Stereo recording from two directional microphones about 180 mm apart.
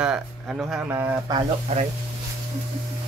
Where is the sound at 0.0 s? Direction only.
5° right (ahead or behind).